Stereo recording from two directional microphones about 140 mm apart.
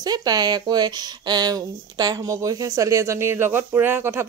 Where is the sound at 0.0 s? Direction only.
30° right (ahead or behind).